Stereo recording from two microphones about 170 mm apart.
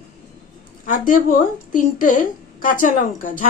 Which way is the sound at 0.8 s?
55° left (ahead or behind).